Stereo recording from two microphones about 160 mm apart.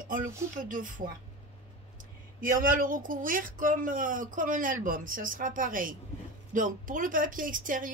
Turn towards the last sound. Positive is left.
turn(degrees=-55)  # may be behind; listen again after turning